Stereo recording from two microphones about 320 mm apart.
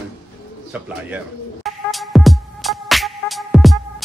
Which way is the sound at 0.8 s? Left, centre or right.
Centre.